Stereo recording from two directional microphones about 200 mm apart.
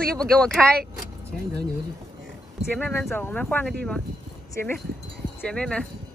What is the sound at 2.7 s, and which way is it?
Speech, 10° left (ahead or behind).